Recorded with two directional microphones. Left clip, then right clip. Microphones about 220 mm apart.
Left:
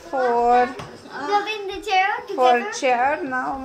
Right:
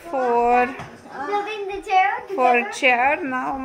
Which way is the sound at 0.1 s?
15° right (ahead or behind).